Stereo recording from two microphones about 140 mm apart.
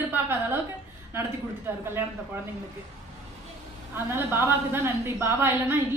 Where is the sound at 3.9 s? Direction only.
15° right (ahead or behind).